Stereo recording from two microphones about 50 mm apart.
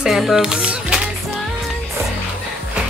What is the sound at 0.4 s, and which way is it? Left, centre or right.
Music, centre.